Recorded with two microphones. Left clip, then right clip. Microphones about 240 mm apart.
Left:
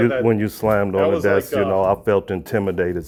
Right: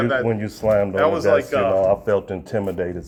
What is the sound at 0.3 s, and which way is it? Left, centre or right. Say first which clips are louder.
Speech: left 2 dB; left.